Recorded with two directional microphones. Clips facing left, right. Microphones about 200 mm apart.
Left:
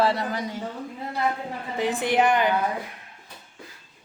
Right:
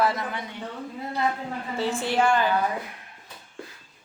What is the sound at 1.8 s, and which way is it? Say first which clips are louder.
Speech: left 2 dB; 15° left (ahead or behind).